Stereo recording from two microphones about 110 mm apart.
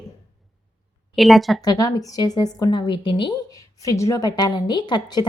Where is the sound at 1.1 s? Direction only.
Centre (ahead or behind).